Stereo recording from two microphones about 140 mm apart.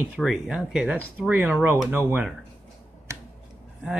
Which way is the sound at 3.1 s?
20° right (ahead or behind).